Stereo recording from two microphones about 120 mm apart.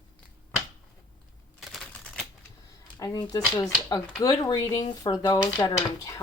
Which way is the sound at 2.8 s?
35° left (ahead or behind).